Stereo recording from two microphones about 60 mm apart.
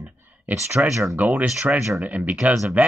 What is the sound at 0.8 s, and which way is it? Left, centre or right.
Speech, right.